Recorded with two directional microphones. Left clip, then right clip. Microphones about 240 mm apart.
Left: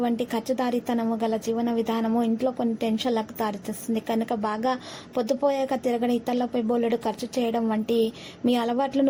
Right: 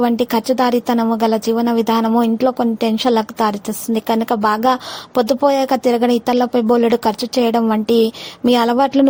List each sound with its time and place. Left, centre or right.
0.0 s speech: right